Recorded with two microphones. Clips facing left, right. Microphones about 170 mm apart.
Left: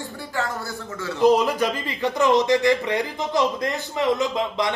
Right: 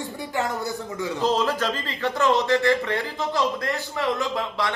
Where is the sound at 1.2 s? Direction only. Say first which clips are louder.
Left 6 dB; 15° left (ahead or behind).